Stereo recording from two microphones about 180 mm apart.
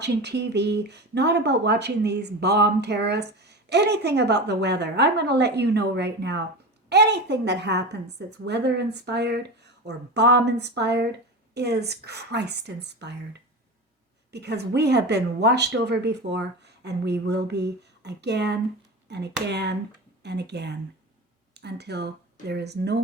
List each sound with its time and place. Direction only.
0.0 s speech: 70° right (ahead or behind)